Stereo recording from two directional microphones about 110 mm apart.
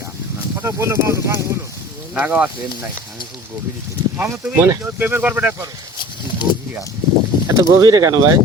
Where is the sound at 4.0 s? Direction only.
30° right (ahead or behind).